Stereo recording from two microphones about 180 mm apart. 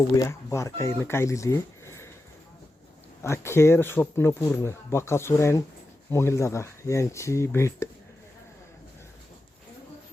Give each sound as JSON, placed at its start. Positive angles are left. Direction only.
{"t": 0.2, "sound": "speech", "side_deg": 15}
{"t": 3.2, "sound": "speech", "side_deg": 15}